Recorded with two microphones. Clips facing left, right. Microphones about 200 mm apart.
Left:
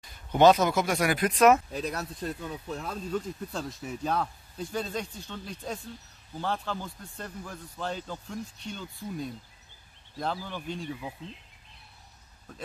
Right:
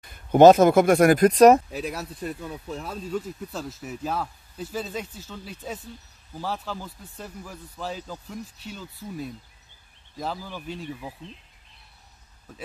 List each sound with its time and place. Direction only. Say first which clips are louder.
0.0 s speech: right 7 dB; 50° right (ahead or behind)
1.7 s speech: right 1 dB; 5° right (ahead or behind)